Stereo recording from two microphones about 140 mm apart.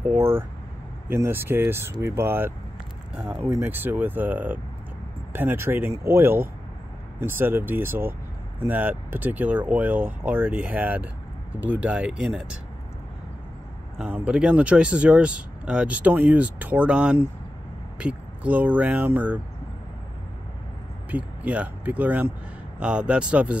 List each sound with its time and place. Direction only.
0.1 s speech: 15° right (ahead or behind)
3.4 s speech: 15° right (ahead or behind)
13.9 s speech: 5° right (ahead or behind)
21.1 s speech: 10° right (ahead or behind)